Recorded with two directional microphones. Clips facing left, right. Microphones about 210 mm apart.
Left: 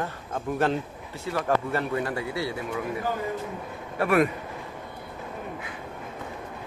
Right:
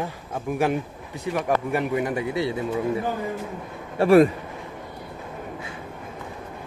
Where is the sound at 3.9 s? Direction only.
30° right (ahead or behind).